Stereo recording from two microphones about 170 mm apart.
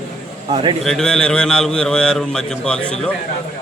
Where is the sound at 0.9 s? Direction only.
5° left (ahead or behind).